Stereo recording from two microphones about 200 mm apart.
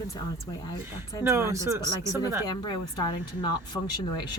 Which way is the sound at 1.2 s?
15° right (ahead or behind).